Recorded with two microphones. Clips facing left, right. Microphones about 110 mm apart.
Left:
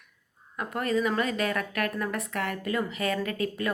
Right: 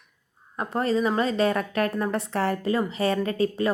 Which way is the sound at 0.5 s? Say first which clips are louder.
Right 3 dB; 30° right (ahead or behind).